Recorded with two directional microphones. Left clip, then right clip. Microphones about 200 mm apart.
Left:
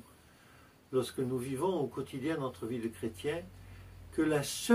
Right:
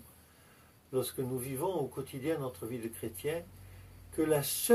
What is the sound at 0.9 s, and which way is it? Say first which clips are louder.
Speech: left 1 dB; 5° left (ahead or behind).